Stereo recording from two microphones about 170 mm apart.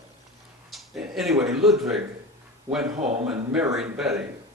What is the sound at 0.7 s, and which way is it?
A man's voice, centre (ahead or behind).